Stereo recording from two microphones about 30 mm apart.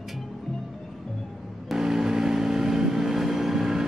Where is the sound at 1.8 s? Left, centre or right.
Centre.